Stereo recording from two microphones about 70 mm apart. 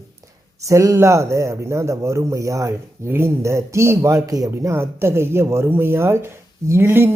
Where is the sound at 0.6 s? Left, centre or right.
Right.